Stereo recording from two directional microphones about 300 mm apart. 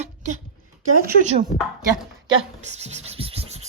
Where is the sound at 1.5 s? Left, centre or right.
Left.